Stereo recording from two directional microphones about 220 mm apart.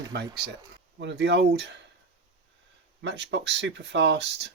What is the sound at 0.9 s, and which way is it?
Speech, 50° right (ahead or behind).